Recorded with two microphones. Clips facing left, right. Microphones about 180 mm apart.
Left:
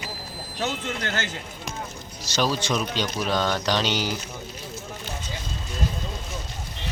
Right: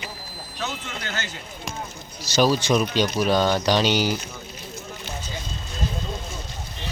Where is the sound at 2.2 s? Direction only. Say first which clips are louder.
Right 5 dB; 5° right (ahead or behind).